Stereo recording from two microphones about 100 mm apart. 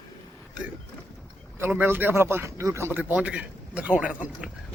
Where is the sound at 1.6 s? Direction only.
20° right (ahead or behind).